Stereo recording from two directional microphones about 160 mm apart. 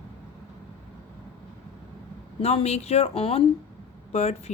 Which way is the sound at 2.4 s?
40° left (ahead or behind).